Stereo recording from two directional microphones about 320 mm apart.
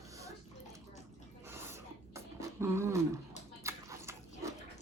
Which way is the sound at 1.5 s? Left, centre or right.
Centre.